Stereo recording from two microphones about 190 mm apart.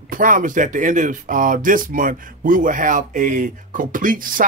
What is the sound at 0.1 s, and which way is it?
Speech, 45° right (ahead or behind).